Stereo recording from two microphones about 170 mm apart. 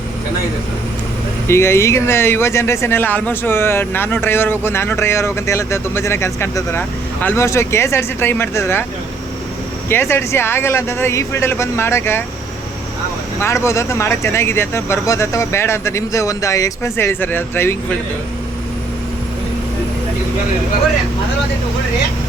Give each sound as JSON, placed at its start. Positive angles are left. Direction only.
{"t": 1.5, "sound": "speech", "side_deg": 15}
{"t": 9.9, "sound": "speech", "side_deg": 15}
{"t": 13.4, "sound": "speech", "side_deg": 15}